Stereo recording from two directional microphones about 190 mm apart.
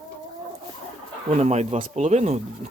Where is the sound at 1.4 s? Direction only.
35° right (ahead or behind).